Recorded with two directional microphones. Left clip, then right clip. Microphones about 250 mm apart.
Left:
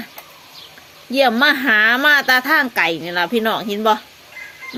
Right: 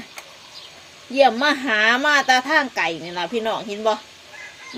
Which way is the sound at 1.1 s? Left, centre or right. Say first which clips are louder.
Left 2 dB; left.